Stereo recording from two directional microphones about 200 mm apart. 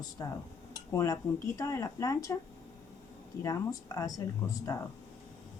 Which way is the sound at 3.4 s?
15° left (ahead or behind).